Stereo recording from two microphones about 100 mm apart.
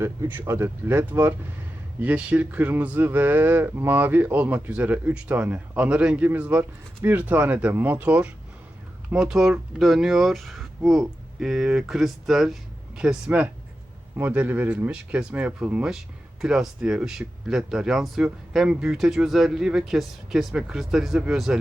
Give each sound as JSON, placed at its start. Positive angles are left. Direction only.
{"t": 0.0, "sound": "speech", "side_deg": -25}
{"t": 14.2, "sound": "speech", "side_deg": -20}